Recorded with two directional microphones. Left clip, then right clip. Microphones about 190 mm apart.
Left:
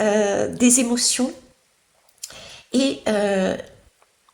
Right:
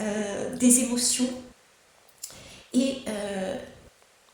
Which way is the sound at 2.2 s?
30° left (ahead or behind).